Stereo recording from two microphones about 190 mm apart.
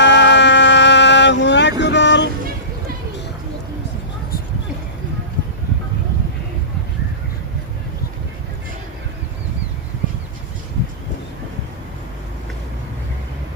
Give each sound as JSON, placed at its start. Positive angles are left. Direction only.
{"t": 0.0, "sound": "vehicle", "side_deg": 70}
{"t": 1.8, "sound": "music", "side_deg": 70}